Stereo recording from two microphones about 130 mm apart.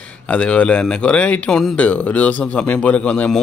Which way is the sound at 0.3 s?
10° left (ahead or behind).